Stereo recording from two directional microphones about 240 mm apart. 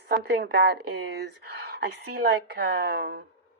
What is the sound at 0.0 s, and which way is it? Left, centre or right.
A woman's voice, right.